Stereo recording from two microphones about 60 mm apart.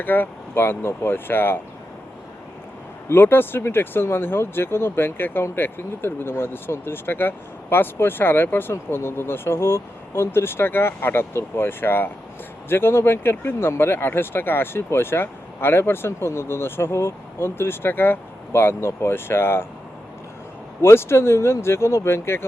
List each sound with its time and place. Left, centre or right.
0.0 s speech: left
3.1 s speech: left
20.8 s speech: left